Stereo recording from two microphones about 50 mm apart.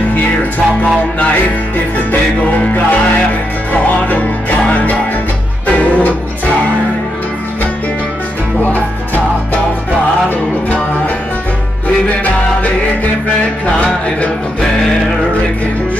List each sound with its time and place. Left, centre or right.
2.4 s music: left
8.6 s music: left
13.8 s music: left